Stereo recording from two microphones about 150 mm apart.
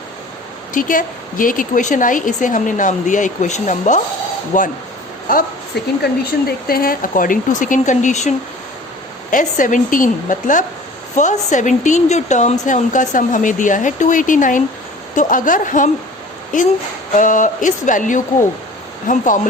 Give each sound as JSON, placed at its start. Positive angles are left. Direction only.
{"t": 0.7, "sound": "a woman's voice", "side_deg": 65}
{"t": 5.7, "sound": "speech", "side_deg": 90}
{"t": 6.7, "sound": "a woman's voice", "side_deg": 80}
{"t": 9.3, "sound": "a woman's voice", "side_deg": 60}